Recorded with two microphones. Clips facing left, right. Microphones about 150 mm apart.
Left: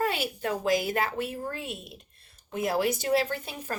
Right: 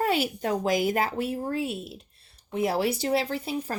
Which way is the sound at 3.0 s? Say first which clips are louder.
Even; 35° right (ahead or behind).